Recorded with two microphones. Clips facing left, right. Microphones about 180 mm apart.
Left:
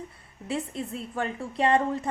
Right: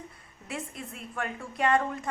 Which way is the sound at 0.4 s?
30° left (ahead or behind).